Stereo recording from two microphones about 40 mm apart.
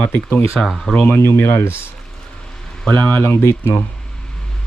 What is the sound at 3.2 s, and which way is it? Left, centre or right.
Speech, left.